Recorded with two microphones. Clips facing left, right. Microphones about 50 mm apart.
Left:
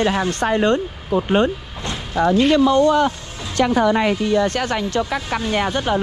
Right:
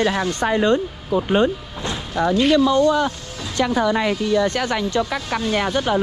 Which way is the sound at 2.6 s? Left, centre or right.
Left.